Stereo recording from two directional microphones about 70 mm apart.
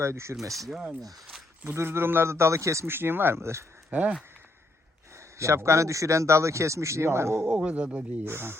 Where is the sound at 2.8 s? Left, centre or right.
Right.